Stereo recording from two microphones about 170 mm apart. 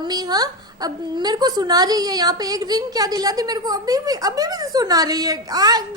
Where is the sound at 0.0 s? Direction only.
25° right (ahead or behind).